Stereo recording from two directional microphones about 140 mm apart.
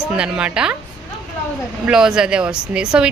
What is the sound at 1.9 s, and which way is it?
Speech, 5° right (ahead or behind).